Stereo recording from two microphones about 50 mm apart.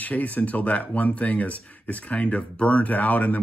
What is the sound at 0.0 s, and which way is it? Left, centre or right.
Speech, left.